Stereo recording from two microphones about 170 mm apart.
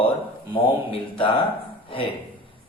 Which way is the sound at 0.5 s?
30° left (ahead or behind).